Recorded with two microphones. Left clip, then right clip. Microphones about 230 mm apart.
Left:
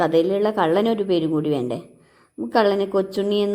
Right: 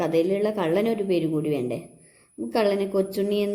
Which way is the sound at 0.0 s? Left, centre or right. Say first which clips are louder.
Left 4 dB; centre.